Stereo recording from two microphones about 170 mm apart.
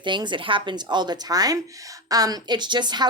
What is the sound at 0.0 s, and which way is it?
A woman's voice, 25° right (ahead or behind).